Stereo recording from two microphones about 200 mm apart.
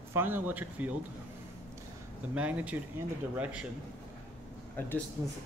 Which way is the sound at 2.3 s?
5° right (ahead or behind).